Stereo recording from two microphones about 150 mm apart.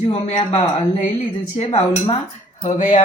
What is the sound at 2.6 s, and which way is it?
Speech, 55° left (ahead or behind).